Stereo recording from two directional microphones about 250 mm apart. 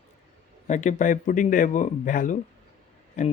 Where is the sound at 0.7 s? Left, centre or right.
Left.